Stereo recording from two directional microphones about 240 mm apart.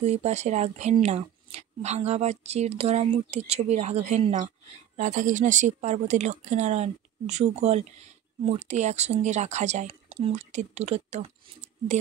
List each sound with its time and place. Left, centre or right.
0.0 s a woman's voice: right